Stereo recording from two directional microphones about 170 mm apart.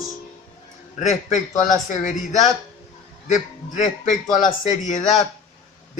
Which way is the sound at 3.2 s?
45° left (ahead or behind).